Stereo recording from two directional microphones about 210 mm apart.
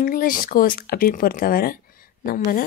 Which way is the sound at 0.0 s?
40° left (ahead or behind).